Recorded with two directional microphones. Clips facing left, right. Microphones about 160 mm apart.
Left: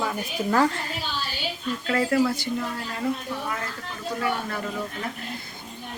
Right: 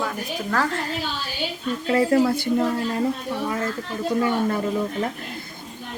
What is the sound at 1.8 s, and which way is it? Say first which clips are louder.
Speech: right 4 dB; 30° right (ahead or behind).